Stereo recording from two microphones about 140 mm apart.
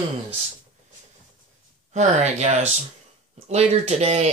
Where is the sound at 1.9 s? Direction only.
55° right (ahead or behind).